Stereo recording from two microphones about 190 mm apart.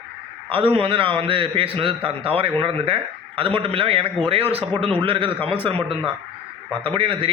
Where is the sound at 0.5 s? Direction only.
30° right (ahead or behind).